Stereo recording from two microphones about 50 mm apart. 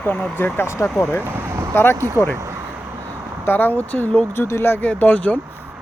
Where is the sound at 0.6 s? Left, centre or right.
Left.